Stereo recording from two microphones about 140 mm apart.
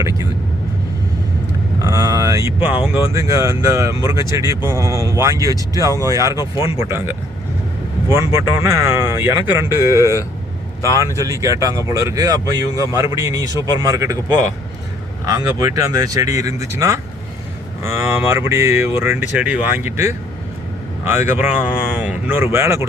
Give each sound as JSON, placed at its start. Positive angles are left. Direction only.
{"t": 0.0, "sound": "speech", "side_deg": -20}
{"t": 1.8, "sound": "speech", "side_deg": -25}
{"t": 10.8, "sound": "speech", "side_deg": 25}
{"t": 11.1, "sound": "speech", "side_deg": -25}